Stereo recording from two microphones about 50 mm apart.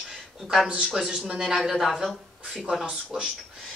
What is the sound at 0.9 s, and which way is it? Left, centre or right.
Speech, centre.